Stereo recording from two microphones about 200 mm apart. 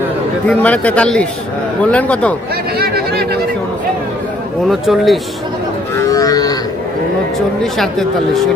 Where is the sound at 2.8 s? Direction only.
50° right (ahead or behind).